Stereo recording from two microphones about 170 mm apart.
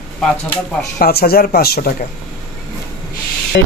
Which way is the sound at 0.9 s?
65° left (ahead or behind).